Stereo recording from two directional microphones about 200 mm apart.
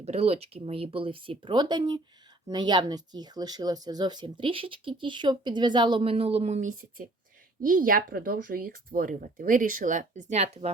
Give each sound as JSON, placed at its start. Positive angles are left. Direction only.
{"t": 0.0, "sound": "speech", "side_deg": -30}